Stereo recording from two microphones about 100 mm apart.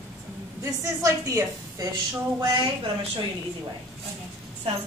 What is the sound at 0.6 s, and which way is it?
A woman's voice, 30° right (ahead or behind).